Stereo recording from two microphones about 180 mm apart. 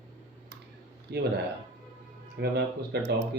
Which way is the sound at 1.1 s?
65° right (ahead or behind).